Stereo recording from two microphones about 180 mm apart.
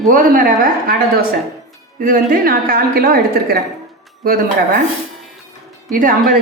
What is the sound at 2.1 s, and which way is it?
A woman's voice, 50° right (ahead or behind).